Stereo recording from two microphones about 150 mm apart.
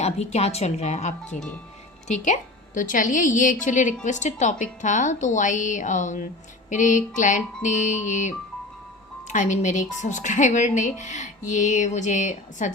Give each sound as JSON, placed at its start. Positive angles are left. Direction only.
{"t": 0.0, "sound": "a woman's voice", "side_deg": 45}
{"t": 9.3, "sound": "a woman's voice", "side_deg": 55}